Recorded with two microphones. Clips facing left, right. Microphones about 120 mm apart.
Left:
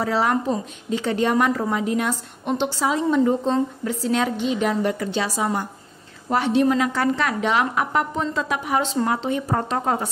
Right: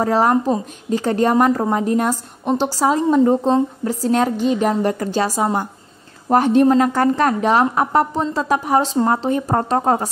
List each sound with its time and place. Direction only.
0.0 s a woman's voice: 40° right (ahead or behind)